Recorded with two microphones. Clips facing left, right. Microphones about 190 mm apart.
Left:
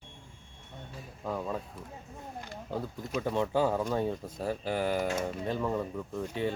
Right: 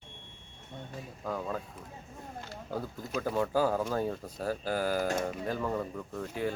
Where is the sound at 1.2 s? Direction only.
Centre (ahead or behind).